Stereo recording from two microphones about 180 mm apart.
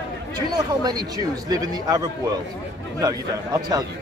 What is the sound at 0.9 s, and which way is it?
A man's voice, 20° right (ahead or behind).